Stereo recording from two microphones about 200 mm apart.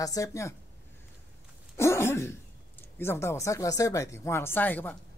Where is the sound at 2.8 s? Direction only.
10° left (ahead or behind).